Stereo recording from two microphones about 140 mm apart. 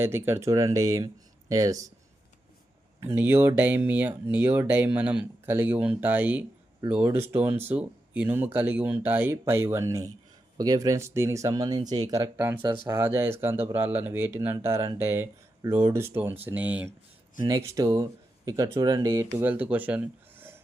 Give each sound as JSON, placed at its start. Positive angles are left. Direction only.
{"t": 0.0, "sound": "speech", "side_deg": -15}
{"t": 3.0, "sound": "speech", "side_deg": -15}
{"t": 12.5, "sound": "speech", "side_deg": -35}
{"t": 12.9, "sound": "speech", "side_deg": -15}
{"t": 17.6, "sound": "speech", "side_deg": -20}